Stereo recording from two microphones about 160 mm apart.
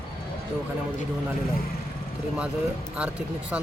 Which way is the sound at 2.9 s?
5° right (ahead or behind).